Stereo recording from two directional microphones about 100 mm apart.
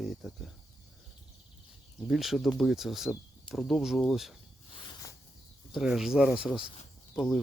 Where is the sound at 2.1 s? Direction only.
Centre (ahead or behind).